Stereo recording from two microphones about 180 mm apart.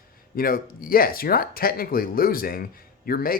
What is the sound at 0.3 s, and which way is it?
Speech, 55° left (ahead or behind).